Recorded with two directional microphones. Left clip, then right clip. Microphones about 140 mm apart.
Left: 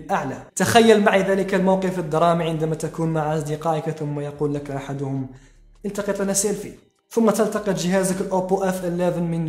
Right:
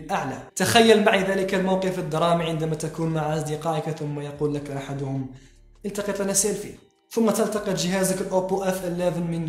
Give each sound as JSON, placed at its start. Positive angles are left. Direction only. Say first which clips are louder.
{"t": 0.1, "sound": "a woman's voice", "louder": "left 3 dB", "side_deg": 45}